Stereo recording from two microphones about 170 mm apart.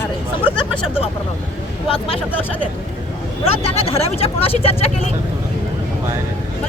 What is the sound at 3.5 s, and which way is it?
Speech, 35° left (ahead or behind).